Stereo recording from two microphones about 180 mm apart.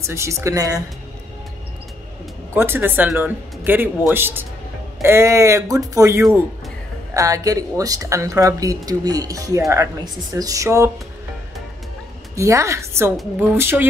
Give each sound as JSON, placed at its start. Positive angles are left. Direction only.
{"t": 0.0, "sound": "speech", "side_deg": -15}
{"t": 2.5, "sound": "speech", "side_deg": -10}
{"t": 12.4, "sound": "speech", "side_deg": -15}